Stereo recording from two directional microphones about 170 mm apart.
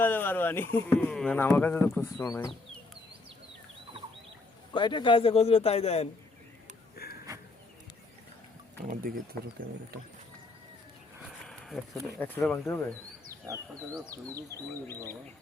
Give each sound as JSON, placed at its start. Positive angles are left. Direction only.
{"t": 0.0, "sound": "speech", "side_deg": 10}
{"t": 4.7, "sound": "a man's voice", "side_deg": 25}
{"t": 6.9, "sound": "a sound", "side_deg": 65}
{"t": 8.9, "sound": "speech", "side_deg": -55}
{"t": 11.4, "sound": "a sound", "side_deg": 0}
{"t": 12.2, "sound": "speech", "side_deg": 10}
{"t": 14.1, "sound": "speech", "side_deg": -20}